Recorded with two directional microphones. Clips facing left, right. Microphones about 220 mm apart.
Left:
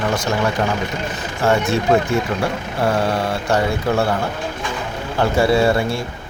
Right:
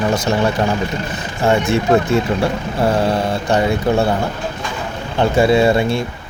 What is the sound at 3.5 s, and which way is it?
Speech, 20° right (ahead or behind).